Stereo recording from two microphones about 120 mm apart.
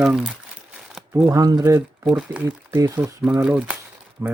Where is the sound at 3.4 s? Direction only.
10° right (ahead or behind).